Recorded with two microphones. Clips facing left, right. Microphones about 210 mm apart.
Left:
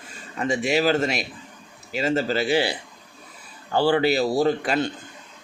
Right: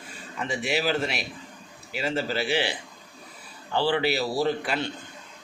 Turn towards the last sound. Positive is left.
turn(degrees=45)  # may be behind; listen again after turning